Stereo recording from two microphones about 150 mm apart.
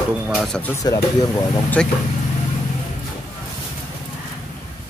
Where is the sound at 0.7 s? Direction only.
25° left (ahead or behind).